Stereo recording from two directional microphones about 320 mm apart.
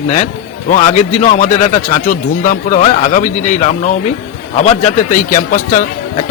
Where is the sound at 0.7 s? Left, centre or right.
Left.